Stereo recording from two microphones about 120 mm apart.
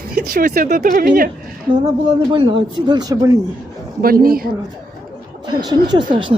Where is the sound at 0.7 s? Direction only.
90° right.